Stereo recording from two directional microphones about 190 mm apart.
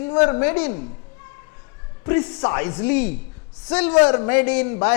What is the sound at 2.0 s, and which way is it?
A man's voice, 10° left (ahead or behind).